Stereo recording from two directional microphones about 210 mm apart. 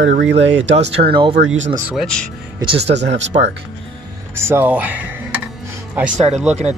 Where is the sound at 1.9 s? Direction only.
Centre (ahead or behind).